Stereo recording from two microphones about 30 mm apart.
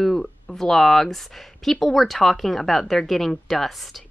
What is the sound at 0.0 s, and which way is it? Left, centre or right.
Speech, centre.